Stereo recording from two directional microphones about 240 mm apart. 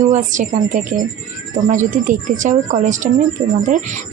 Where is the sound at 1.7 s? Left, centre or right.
Right.